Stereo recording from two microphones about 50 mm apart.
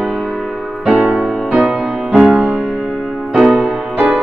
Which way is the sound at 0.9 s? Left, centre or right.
Right.